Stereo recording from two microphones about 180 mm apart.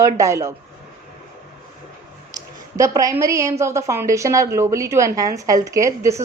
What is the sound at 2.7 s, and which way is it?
A woman's voice, 15° right (ahead or behind).